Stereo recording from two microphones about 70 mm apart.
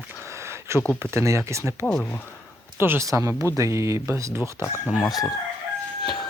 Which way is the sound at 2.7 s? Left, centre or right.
Right.